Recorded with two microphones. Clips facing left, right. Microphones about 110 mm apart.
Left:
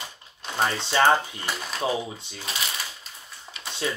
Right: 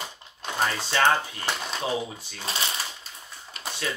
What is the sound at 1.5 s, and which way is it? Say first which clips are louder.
Speech: left 1 dB; centre (ahead or behind).